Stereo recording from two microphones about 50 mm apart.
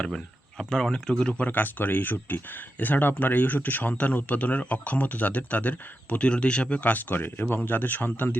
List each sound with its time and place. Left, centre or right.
0.7 s speech: centre
1.5 s speech: left
6.9 s speech: left